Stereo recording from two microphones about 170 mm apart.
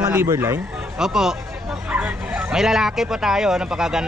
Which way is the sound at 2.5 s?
5° right (ahead or behind).